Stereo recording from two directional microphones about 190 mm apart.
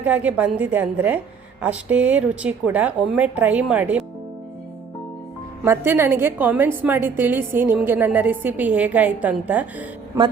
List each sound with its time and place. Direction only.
0.0 s a woman's voice: 10° right (ahead or behind)
5.6 s a woman's voice: 10° right (ahead or behind)